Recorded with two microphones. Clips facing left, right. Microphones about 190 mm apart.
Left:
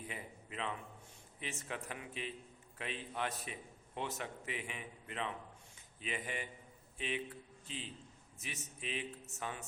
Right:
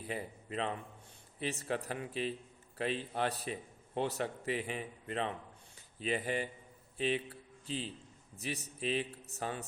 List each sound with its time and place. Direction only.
0.0 s a man's voice: 35° right (ahead or behind)